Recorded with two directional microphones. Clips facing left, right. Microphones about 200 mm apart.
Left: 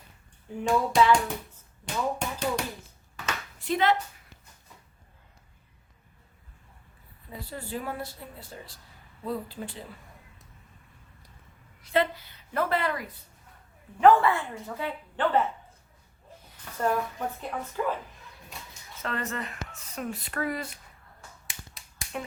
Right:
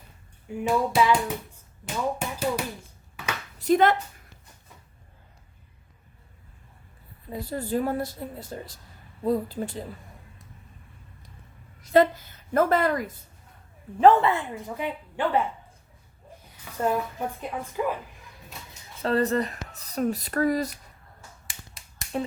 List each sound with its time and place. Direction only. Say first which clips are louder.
0.6 s hands: even; 10° right (ahead or behind)
3.6 s speech: right 5 dB; 45° right (ahead or behind)
7.3 s speech: right 8 dB; 40° right (ahead or behind)
11.8 s a woman's voice: right 7 dB; 45° right (ahead or behind)
14.0 s speech: right 2 dB; 25° right (ahead or behind)
16.6 s speech: right 2 dB; 10° right (ahead or behind)
19.0 s speech: right 10 dB; 35° right (ahead or behind)
21.4 s finger snapping: even; centre (ahead or behind)